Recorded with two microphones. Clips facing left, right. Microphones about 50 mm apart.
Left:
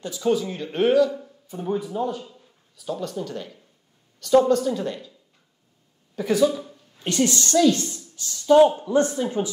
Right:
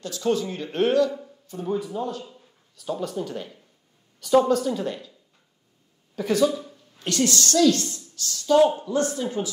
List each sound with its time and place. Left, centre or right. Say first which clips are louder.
0.0 s a man's voice: left 2 dB; centre
1.5 s a man's voice: left 1 dB; centre
2.2 s a man's voice: even; centre
6.1 s a man's voice: left 1 dB; centre
7.1 s a woman's voice: left 1 dB; left